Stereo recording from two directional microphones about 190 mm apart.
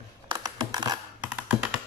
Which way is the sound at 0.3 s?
20° right (ahead or behind).